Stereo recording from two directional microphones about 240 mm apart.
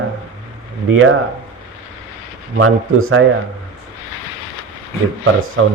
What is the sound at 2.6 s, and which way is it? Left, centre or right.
Speech, right.